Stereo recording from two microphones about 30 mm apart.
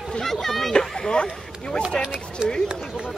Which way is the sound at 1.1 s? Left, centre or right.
Left.